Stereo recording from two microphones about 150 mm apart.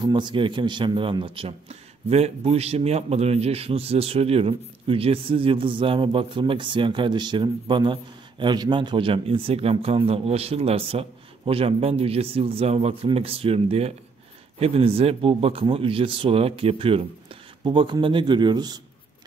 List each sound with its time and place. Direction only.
0.0 s a man's voice: 30° right (ahead or behind)